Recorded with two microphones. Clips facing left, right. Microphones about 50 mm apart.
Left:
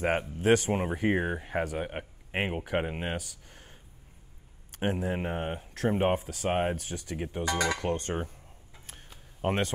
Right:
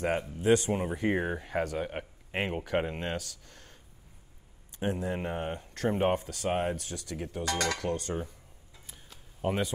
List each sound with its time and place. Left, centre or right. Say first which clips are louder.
0.4 s speech: even; left; by 3.8 s centre
4.9 s speech: left 1 dB; centre
6.4 s speech: left 3 dB; left
7.4 s speech: left 2 dB; centre
7.8 s cutlery: left 2 dB; left
9.4 s speech: left 1 dB; left